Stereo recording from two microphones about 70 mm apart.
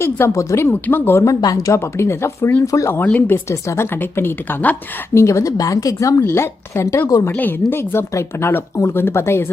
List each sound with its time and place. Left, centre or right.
0.0 s speech: left
2.9 s speech: left
3.5 s speech: left
4.0 s speech: left
5.1 s speech: left
6.3 s speech: left